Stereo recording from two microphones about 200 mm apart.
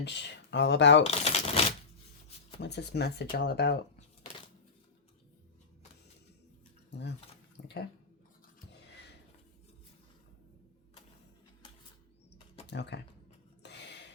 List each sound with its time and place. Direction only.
0.0 s speech: 60° left (ahead or behind)
1.0 s speech: 30° left (ahead or behind)
2.6 s speech: 55° left (ahead or behind)
7.5 s speech: 55° left (ahead or behind)
8.9 s a sound: 55° left (ahead or behind)
12.6 s speech: 60° left (ahead or behind)
13.6 s a sound: 60° left (ahead or behind)